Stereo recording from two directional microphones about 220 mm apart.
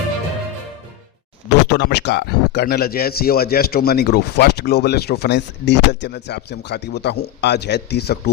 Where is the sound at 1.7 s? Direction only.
50° left (ahead or behind).